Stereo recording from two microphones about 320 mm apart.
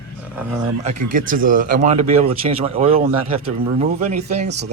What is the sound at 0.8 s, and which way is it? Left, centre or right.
Speech, right.